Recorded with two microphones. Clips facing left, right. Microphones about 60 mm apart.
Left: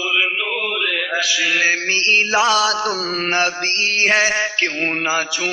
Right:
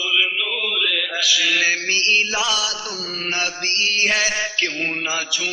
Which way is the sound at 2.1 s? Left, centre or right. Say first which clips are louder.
Left 8 dB; left.